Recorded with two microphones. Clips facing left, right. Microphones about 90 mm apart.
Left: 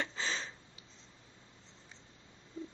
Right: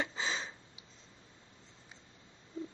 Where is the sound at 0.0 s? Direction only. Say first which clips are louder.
Right 1 dB; 5° right (ahead or behind).